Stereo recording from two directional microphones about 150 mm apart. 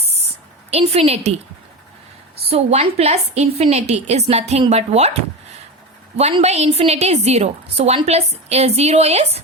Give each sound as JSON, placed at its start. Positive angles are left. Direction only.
{"t": 0.0, "sound": "a sound", "side_deg": -45}
{"t": 0.7, "sound": "a woman's voice", "side_deg": -40}
{"t": 2.5, "sound": "a woman's voice", "side_deg": -45}
{"t": 6.1, "sound": "a woman's voice", "side_deg": -45}